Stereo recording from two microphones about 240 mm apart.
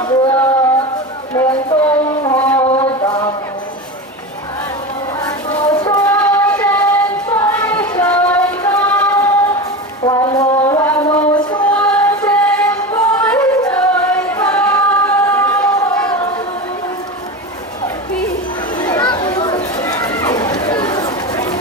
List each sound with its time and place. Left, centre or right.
0.0 s music: centre
1.4 s a sound: centre
2.6 s mantra: left
5.2 s child singing: centre
8.0 s music: centre
10.0 s a sound: centre
11.6 s music: centre
13.1 s singing: centre
18.8 s a sound: centre
20.8 s chatter: centre